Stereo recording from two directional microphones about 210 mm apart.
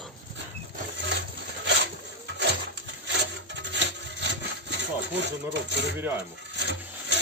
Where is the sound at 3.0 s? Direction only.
55° right (ahead or behind).